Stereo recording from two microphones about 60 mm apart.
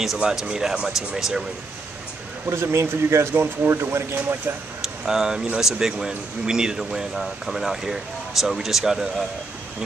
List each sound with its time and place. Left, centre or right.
0.2 s speech: centre
2.5 s speech: right
3.3 s speech: right
5.0 s speech: centre